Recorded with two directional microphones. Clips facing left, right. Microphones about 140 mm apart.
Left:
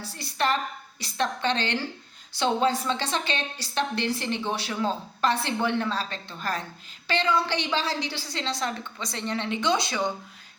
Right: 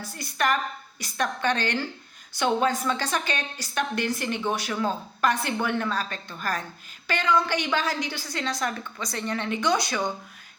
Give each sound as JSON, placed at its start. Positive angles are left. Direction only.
{"t": 0.1, "sound": "speech", "side_deg": 30}